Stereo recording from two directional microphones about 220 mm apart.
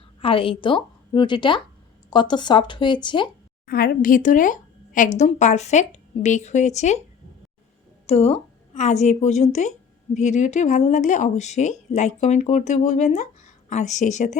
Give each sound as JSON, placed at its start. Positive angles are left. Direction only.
{"t": 0.2, "sound": "a woman's voice", "side_deg": 25}
{"t": 3.7, "sound": "speech", "side_deg": 40}
{"t": 8.0, "sound": "a woman's voice", "side_deg": 30}